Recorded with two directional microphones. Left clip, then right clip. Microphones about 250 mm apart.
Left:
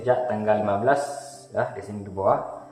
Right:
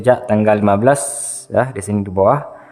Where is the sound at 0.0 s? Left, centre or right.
Right.